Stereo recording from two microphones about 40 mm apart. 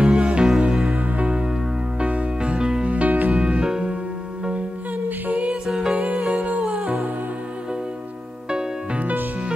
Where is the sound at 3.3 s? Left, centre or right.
Right.